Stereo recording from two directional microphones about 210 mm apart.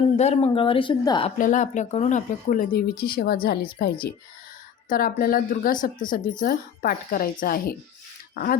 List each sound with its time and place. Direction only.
0.2 s speech: 30° left (ahead or behind)
1.4 s speech: 35° left (ahead or behind)